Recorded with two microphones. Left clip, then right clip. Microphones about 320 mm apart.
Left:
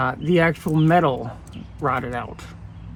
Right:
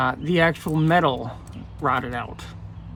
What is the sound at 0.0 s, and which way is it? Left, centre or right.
Speech, centre.